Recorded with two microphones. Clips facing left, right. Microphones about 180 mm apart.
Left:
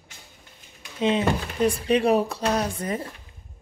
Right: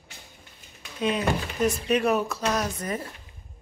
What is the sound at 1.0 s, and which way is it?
Speech, 25° left (ahead or behind).